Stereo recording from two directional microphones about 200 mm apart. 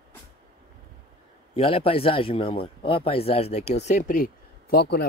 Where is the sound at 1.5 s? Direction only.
30° left (ahead or behind); by 5.0 s 50° left (ahead or behind).